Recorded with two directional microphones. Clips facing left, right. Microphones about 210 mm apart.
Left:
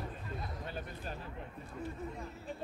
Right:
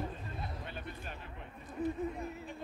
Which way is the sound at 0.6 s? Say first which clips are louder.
Left 2 dB; 35° left (ahead or behind).